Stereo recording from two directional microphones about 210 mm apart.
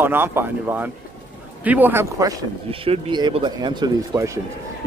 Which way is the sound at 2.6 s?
25° right (ahead or behind).